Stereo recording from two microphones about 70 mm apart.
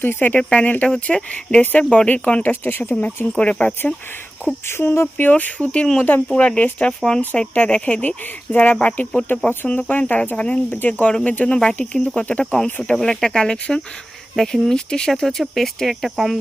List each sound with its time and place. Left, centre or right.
0.0 s speech: left
4.6 s speech: left; by 10.6 s centre
10.7 s speech: left
11.0 s speech: centre
13.0 s speech: centre